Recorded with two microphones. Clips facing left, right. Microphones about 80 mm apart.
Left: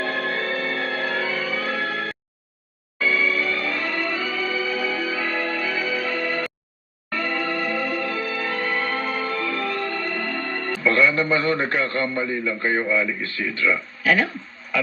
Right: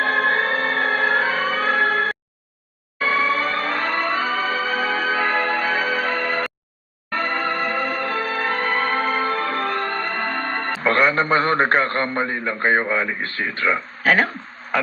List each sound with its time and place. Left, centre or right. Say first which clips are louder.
0.0 s music: right 6 dB; right